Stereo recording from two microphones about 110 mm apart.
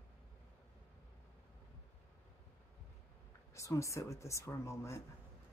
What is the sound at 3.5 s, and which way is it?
Speech, 25° left (ahead or behind).